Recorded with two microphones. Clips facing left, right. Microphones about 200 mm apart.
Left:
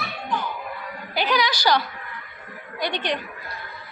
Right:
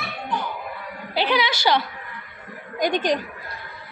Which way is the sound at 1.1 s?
25° right (ahead or behind).